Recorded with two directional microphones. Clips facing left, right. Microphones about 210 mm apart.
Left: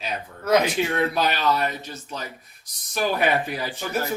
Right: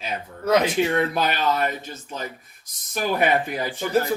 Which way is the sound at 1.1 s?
50° right (ahead or behind).